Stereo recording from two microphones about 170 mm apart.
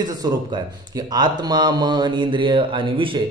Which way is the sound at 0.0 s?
25° right (ahead or behind).